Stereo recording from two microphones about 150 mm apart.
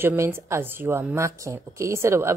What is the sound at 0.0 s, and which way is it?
Speech, 15° right (ahead or behind).